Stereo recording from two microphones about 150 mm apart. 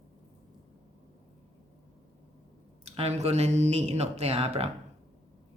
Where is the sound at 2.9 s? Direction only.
45° right (ahead or behind).